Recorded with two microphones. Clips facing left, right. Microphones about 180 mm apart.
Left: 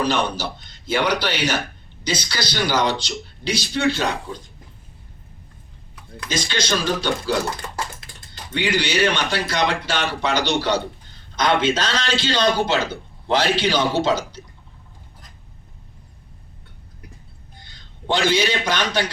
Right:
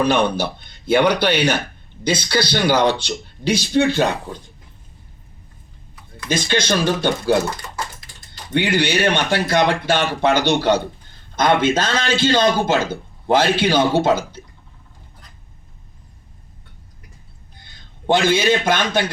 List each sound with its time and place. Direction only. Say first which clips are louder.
0.0 s a man's voice: right 5 dB; 55° right (ahead or behind)
6.2 s a man's voice: right 5 dB; 55° right (ahead or behind)
8.5 s a man's voice: right 3 dB; 55° right (ahead or behind)
18.0 s a man's voice: right 4 dB; 50° right (ahead or behind)